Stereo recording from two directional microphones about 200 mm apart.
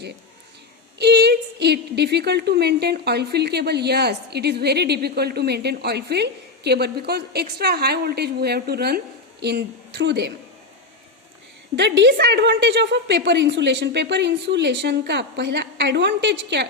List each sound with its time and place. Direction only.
0.9 s a woman's voice: 55° right (ahead or behind)
11.8 s a woman's voice: 60° right (ahead or behind)